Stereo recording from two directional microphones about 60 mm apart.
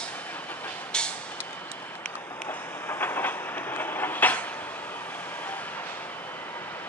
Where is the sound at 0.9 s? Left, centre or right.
Centre.